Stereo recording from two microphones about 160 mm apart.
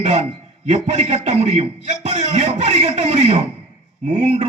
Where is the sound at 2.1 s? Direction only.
45° right (ahead or behind).